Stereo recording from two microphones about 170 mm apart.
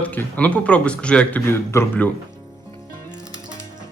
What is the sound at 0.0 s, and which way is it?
Speech, 10° left (ahead or behind).